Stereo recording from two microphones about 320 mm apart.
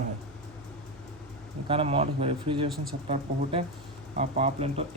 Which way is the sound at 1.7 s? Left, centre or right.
Centre.